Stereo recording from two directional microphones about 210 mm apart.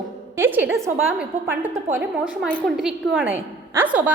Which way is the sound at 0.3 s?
10° right (ahead or behind).